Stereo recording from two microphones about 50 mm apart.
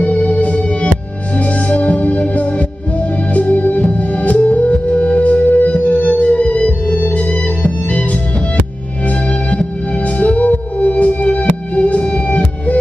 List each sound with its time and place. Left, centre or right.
0.0 s organ: left
1.3 s music: left